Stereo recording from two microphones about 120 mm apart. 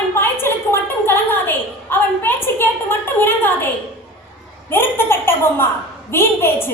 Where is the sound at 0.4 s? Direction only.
20° left (ahead or behind).